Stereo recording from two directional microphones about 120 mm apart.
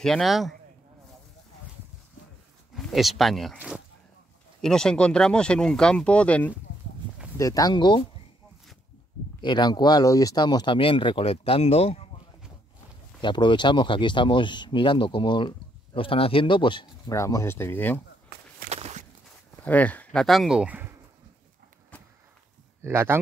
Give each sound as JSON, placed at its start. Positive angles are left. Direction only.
{"t": 0.0, "sound": "speech", "side_deg": 0}
{"t": 2.7, "sound": "speech", "side_deg": 0}
{"t": 3.5, "sound": "speech", "side_deg": -10}
{"t": 4.6, "sound": "speech", "side_deg": 5}
{"t": 7.3, "sound": "speech", "side_deg": 30}
{"t": 9.4, "sound": "speech", "side_deg": 40}
{"t": 13.2, "sound": "speech", "side_deg": 40}
{"t": 17.1, "sound": "speech", "side_deg": 25}
{"t": 18.7, "sound": "walk", "side_deg": -65}
{"t": 19.6, "sound": "speech", "side_deg": 15}
{"t": 22.8, "sound": "speech", "side_deg": -20}